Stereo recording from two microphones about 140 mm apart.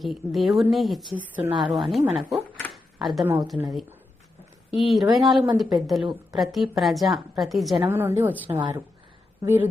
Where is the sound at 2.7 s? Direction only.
Centre (ahead or behind).